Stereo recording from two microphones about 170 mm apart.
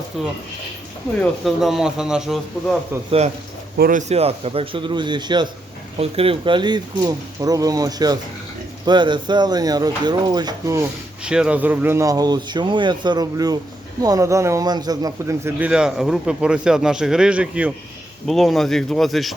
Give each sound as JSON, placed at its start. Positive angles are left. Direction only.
{"t": 0.1, "sound": "a man's voice", "side_deg": 0}
{"t": 3.8, "sound": "speech", "side_deg": -55}
{"t": 4.1, "sound": "speech", "side_deg": -35}
{"t": 11.2, "sound": "a man's voice", "side_deg": -5}